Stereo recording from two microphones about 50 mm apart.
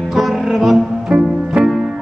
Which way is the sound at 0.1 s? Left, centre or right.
Centre.